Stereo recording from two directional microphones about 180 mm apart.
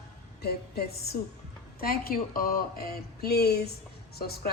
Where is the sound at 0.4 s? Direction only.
60° left (ahead or behind).